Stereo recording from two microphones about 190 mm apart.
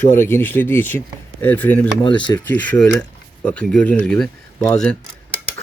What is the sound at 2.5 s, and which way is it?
Speech, 10° left (ahead or behind).